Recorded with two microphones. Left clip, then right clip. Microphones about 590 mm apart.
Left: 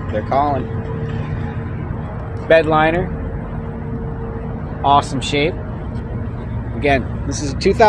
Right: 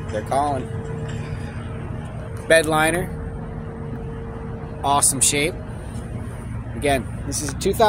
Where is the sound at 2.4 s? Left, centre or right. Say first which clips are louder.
Left 4 dB; right.